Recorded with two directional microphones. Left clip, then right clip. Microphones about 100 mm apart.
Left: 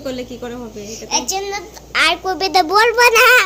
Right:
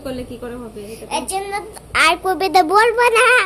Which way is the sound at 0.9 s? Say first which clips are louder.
Left 3 dB; 40° right (ahead or behind).